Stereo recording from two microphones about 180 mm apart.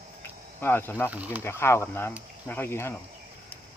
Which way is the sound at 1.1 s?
10° right (ahead or behind).